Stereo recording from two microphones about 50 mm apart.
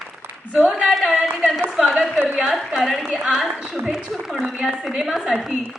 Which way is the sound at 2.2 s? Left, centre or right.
Right.